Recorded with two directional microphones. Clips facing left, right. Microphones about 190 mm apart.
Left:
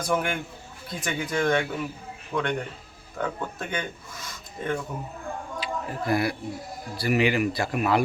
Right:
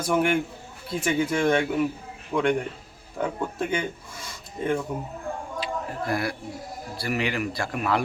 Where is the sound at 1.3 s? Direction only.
25° right (ahead or behind).